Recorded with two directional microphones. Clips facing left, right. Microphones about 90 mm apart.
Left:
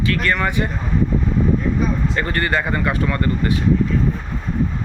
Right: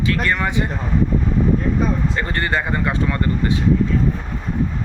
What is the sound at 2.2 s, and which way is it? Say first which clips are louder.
Speech: left 1 dB; 20° right (ahead or behind).